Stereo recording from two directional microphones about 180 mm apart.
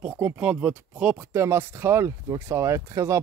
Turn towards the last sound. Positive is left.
turn(degrees=-15)  # may be behind; listen again after turning